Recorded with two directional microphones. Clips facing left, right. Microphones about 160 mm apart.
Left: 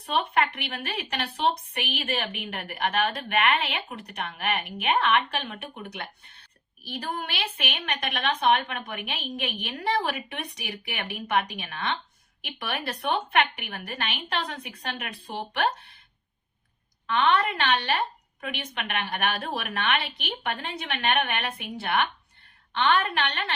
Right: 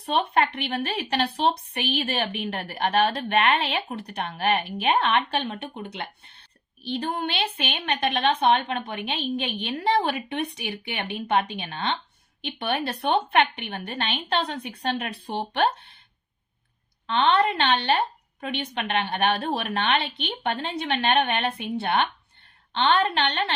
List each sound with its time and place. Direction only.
0.0 s a woman's voice: 30° right (ahead or behind)
17.1 s a woman's voice: 30° right (ahead or behind)